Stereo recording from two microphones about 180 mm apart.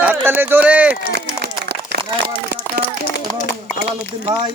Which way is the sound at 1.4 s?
65° right (ahead or behind).